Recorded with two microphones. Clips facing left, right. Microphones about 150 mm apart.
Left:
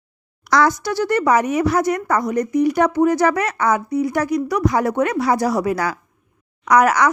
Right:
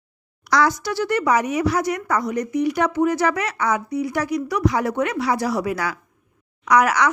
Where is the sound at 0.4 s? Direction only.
50° left (ahead or behind).